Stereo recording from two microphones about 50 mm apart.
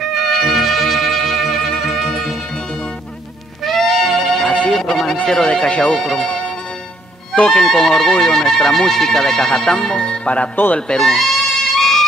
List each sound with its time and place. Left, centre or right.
0.0 s music: centre
3.6 s music: centre
4.5 s music: centre
4.8 s speech: centre
5.2 s speech: centre
6.2 s music: centre
7.6 s speech: centre; by 10.5 s left
10.5 s speech: left
11.0 s music: centre